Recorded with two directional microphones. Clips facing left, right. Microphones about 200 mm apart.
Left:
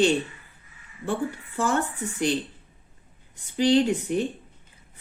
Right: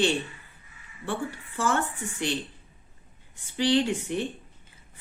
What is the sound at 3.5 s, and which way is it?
Speech, 45° left (ahead or behind).